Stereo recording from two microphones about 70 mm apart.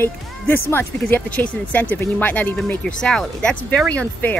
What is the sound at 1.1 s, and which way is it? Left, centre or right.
Speech, left.